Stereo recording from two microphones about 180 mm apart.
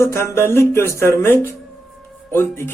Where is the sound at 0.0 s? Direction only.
15° left (ahead or behind).